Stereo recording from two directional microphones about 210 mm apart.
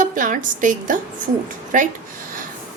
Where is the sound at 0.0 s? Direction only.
40° right (ahead or behind).